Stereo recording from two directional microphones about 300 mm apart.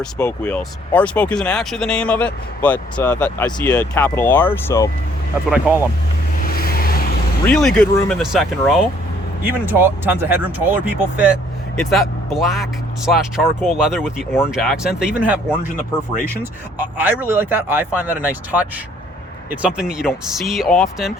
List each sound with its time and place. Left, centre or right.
0.0 s speech: centre
5.5 s speech: centre
6.5 s vehicle: left
7.4 s speech: centre
17.0 s speech: centre